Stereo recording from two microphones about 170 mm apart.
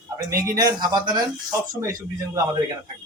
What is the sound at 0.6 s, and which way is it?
Speech, 25° right (ahead or behind).